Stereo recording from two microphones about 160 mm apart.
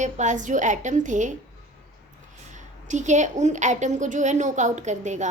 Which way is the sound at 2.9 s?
50° right (ahead or behind).